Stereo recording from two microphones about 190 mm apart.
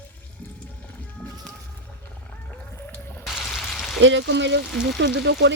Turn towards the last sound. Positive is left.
turn(degrees=-65)  # may be behind; listen again after turning